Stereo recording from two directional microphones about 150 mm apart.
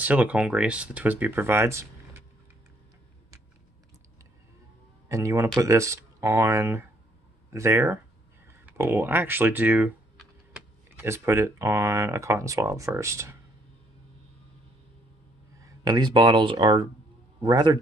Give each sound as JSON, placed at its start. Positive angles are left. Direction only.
{"t": 0.0, "sound": "speech", "side_deg": -10}
{"t": 5.0, "sound": "speech", "side_deg": -20}
{"t": 11.0, "sound": "speech", "side_deg": -15}
{"t": 15.6, "sound": "speech", "side_deg": -25}